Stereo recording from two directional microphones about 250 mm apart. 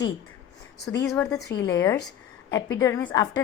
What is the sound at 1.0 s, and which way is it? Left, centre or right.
Speech, centre.